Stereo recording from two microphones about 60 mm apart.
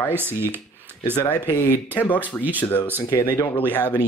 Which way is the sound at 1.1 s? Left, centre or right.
Left.